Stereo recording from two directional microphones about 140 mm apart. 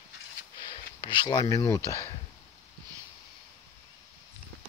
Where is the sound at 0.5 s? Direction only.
30° left (ahead or behind).